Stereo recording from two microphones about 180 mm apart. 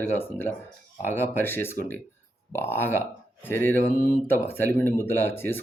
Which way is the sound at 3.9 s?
50° left (ahead or behind).